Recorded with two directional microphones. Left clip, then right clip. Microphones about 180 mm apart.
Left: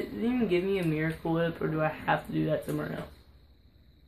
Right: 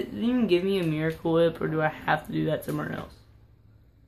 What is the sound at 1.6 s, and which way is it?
Speech, 25° right (ahead or behind).